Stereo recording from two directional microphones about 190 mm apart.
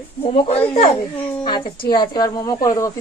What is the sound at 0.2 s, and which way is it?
Speech, 30° left (ahead or behind).